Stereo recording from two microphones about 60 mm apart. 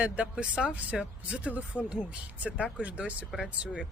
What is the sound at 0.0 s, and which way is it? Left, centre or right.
Speech, right.